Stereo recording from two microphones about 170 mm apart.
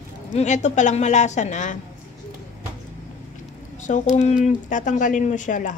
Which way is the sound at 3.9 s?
45° left (ahead or behind).